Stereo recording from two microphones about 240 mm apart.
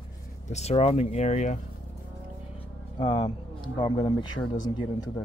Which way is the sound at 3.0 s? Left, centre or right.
Centre.